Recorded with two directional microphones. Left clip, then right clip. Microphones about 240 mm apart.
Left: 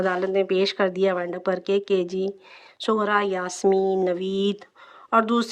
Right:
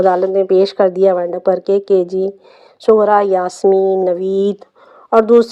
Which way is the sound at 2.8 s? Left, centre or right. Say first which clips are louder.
Right 12 dB; centre.